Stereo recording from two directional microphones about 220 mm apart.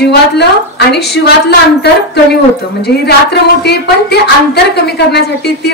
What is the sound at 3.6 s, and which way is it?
A woman's voice, 50° left (ahead or behind).